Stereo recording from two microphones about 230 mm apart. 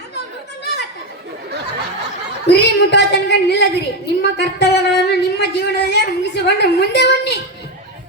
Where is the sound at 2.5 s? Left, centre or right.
Left.